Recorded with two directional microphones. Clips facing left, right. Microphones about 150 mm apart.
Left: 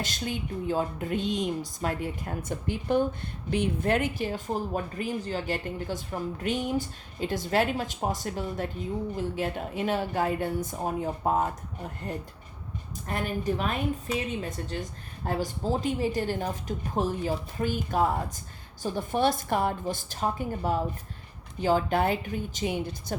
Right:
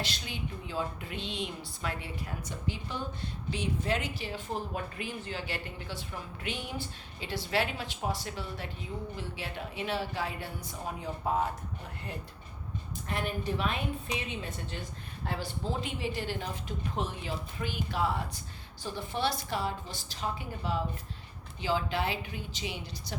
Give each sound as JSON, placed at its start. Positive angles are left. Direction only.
{"t": 0.0, "sound": "a woman's voice", "side_deg": 45}
{"t": 13.1, "sound": "a woman's voice", "side_deg": 45}